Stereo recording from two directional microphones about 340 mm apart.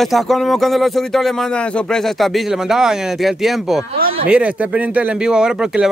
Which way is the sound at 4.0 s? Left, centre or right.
Right.